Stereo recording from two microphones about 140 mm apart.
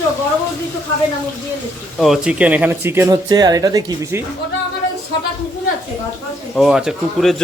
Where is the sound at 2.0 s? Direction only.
5° right (ahead or behind).